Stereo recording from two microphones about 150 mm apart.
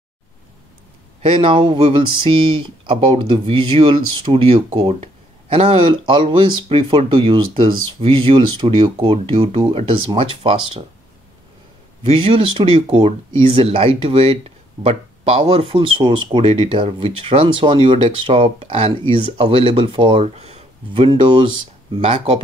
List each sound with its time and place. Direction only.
1.2 s speech: 35° right (ahead or behind)
12.0 s speech: 35° right (ahead or behind)